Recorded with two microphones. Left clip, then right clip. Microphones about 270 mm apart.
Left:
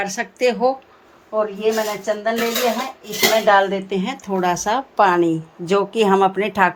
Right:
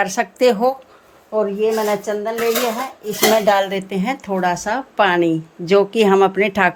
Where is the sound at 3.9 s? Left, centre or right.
Centre.